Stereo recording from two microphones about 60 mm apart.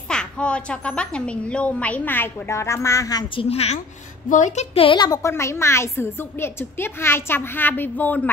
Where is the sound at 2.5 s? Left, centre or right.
Left.